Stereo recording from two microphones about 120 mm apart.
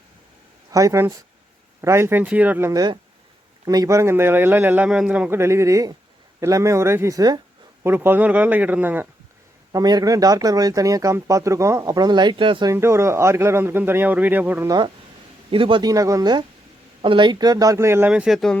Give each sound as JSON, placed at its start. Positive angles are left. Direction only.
{"t": 0.7, "sound": "speech", "side_deg": -25}
{"t": 2.7, "sound": "speech", "side_deg": -35}
{"t": 5.4, "sound": "speech", "side_deg": -25}
{"t": 7.9, "sound": "speech", "side_deg": -15}
{"t": 9.7, "sound": "speech", "side_deg": -30}
{"t": 12.7, "sound": "speech", "side_deg": -20}
{"t": 15.4, "sound": "a man's voice", "side_deg": -45}
{"t": 15.8, "sound": "speech", "side_deg": -30}
{"t": 18.1, "sound": "speech", "side_deg": -5}